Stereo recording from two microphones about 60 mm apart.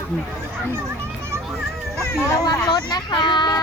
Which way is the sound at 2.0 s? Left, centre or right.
Left.